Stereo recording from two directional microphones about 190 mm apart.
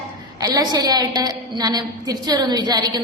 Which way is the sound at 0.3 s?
20° right (ahead or behind).